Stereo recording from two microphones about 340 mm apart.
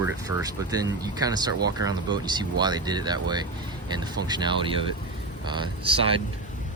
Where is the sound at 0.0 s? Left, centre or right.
Centre.